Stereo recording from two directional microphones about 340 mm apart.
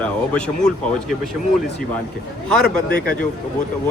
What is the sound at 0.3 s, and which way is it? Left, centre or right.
Speech, centre.